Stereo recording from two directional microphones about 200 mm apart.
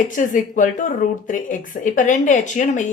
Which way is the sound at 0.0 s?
40° left (ahead or behind).